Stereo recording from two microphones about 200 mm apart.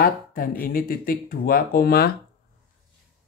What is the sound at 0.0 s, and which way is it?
Speech, 45° left (ahead or behind).